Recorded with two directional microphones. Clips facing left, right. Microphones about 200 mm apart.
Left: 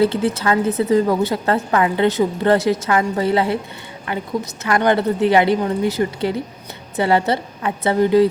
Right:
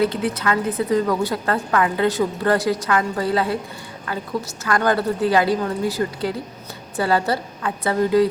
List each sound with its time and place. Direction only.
0.0 s a woman's voice: 25° left (ahead or behind)